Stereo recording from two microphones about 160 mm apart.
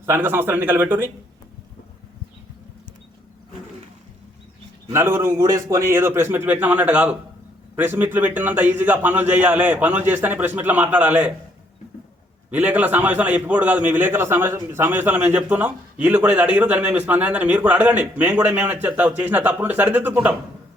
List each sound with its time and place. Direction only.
0.0 s a man's voice: 15° right (ahead or behind)
4.9 s a man's voice: 15° right (ahead or behind)
12.5 s a man's voice: 10° right (ahead or behind)